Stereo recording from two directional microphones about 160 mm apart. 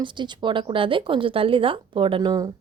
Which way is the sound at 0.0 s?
30° right (ahead or behind).